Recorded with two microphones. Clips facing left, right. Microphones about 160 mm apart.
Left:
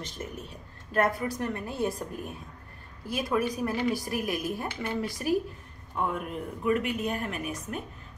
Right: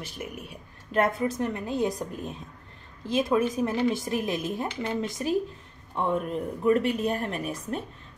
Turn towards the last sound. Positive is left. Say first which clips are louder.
# right 3 dB
turn(degrees=-35)  # may be behind; listen again after turning